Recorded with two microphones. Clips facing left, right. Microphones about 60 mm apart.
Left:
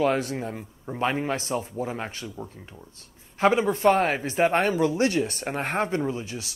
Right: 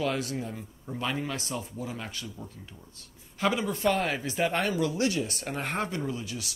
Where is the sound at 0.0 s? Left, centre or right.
Left.